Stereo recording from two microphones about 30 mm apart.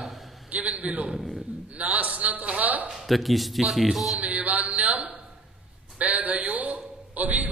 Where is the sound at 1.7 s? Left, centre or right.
Right.